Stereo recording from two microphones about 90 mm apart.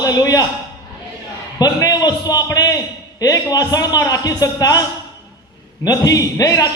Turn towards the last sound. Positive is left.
turn(degrees=40)  # may be behind; listen again after turning